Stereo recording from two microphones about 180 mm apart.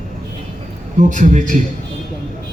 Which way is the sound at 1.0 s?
45° right (ahead or behind).